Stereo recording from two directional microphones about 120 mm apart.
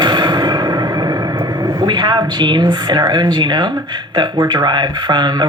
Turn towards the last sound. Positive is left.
turn(degrees=-35)  # may be behind; listen again after turning